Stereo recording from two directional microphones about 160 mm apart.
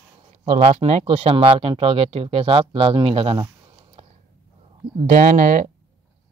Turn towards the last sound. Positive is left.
turn(degrees=-55)  # may be behind; listen again after turning